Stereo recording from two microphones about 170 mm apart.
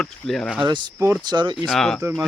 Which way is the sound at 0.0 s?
5° left (ahead or behind).